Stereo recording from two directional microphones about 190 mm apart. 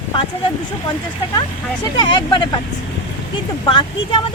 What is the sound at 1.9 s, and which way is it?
Speech, 25° left (ahead or behind).